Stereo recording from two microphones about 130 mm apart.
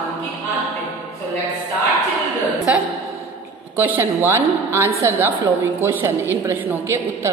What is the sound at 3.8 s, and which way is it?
A woman's voice, 15° right (ahead or behind).